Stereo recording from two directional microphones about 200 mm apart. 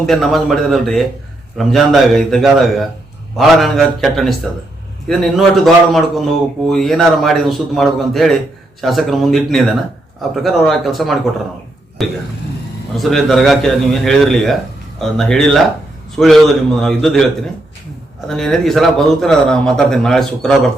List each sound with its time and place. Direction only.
0.0 s a man's voice: centre (ahead or behind)
18.3 s a man's voice: centre (ahead or behind)